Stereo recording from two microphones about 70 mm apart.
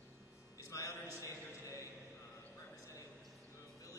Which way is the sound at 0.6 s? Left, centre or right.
Left.